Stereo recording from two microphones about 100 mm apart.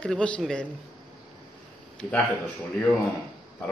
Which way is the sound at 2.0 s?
10° left (ahead or behind).